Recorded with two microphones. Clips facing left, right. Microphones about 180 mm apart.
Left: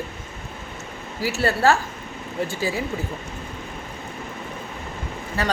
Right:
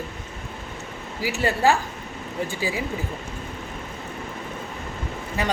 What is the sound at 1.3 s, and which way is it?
Speech, 15° right (ahead or behind).